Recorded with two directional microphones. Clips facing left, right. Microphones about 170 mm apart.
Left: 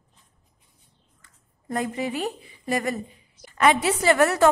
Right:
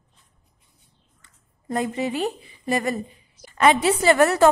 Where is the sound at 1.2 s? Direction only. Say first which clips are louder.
Right 3 dB; 25° right (ahead or behind).